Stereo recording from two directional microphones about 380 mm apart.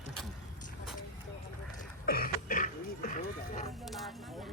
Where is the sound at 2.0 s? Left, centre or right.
Left.